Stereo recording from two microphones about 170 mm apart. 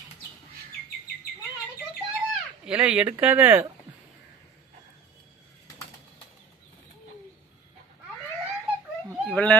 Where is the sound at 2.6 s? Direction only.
5° right (ahead or behind).